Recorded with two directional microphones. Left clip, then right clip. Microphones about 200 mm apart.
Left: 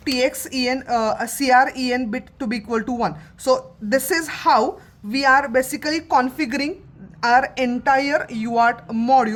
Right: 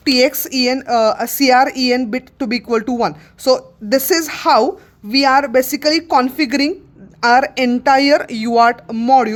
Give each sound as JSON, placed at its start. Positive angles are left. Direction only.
{"t": 0.0, "sound": "a woman's voice", "side_deg": -45}